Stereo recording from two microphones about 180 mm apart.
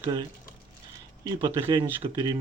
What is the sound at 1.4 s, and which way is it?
Speech, 20° right (ahead or behind).